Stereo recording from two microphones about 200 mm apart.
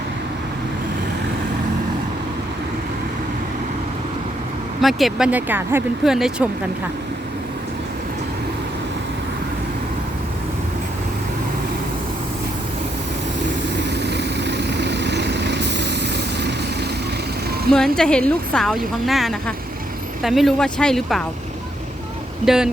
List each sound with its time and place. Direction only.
4.8 s a woman's voice: centre (ahead or behind)
13.7 s vehicle: 60° right (ahead or behind)
17.7 s a woman's voice: 5° left (ahead or behind)
22.4 s a woman's voice: 5° right (ahead or behind)